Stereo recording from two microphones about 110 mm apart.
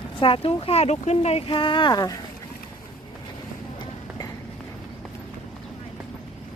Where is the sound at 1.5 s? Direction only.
50° left (ahead or behind).